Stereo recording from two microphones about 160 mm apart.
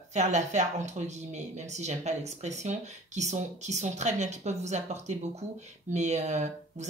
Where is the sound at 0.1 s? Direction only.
45° right (ahead or behind).